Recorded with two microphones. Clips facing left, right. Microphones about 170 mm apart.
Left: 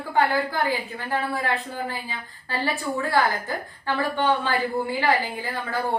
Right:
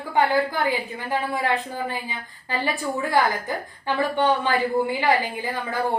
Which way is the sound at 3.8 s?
15° right (ahead or behind).